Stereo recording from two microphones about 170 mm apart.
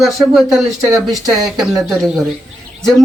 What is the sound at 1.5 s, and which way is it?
Speech, 5° right (ahead or behind).